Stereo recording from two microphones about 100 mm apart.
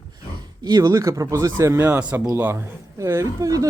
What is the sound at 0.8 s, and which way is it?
Speech, 35° right (ahead or behind).